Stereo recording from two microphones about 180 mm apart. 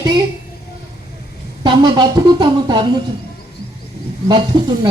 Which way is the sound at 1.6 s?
25° right (ahead or behind).